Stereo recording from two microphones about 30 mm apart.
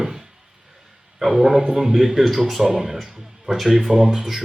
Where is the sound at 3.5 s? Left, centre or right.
Centre.